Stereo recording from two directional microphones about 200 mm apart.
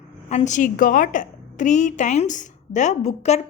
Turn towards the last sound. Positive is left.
turn(degrees=35)  # may be behind; listen again after turning